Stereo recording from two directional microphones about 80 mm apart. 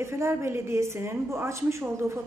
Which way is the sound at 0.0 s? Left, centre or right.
Right.